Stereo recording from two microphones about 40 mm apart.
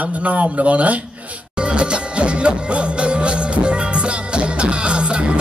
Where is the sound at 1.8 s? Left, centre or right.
Right.